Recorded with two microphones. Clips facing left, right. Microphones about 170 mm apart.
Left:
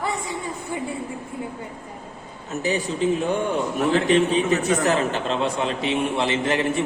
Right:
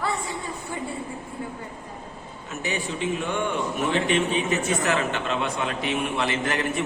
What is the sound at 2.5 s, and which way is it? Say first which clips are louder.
A man's voice: left 5 dB; 35° left (ahead or behind).